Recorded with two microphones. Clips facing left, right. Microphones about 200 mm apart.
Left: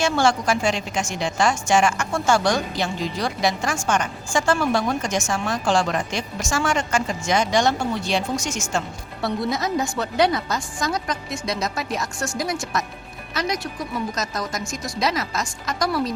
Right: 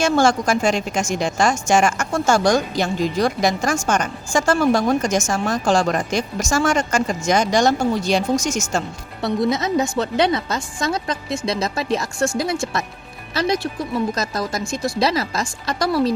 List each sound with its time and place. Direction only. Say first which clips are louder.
0.0 s a woman's voice: right 3 dB; 45° right (ahead or behind)
9.2 s a woman's voice: right 4 dB; 20° right (ahead or behind)